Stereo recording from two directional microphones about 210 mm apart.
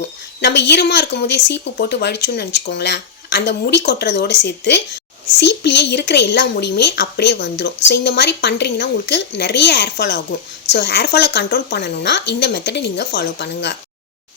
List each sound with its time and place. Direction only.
0.4 s speech: 55° left (ahead or behind)